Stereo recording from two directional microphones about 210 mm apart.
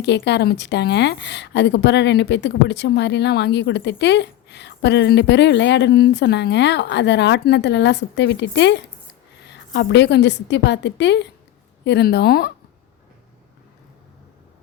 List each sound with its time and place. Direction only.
0.0 s speech: 55° left (ahead or behind)